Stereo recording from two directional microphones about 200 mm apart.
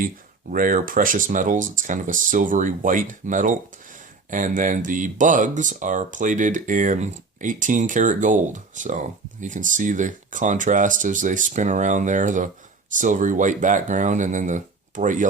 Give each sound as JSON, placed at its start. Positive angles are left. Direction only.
{"t": 0.5, "sound": "speech", "side_deg": -45}